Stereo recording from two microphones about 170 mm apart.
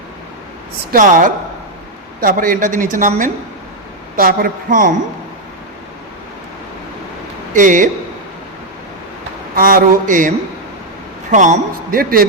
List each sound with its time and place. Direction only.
0.9 s a woman's voice: 55° right (ahead or behind)
7.5 s a woman's voice: 50° right (ahead or behind)
9.6 s a woman's voice: 55° right (ahead or behind)